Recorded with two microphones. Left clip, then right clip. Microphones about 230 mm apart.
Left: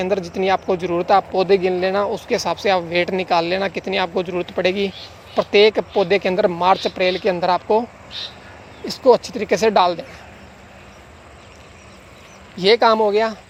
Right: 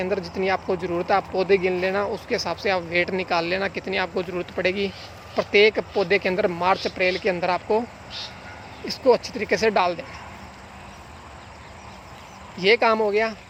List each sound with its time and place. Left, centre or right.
0.0 s speech: left
8.9 s speech: left
12.5 s speech: left